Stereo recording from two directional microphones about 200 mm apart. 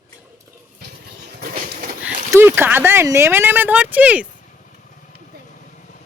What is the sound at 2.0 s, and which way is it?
Speech, 10° right (ahead or behind).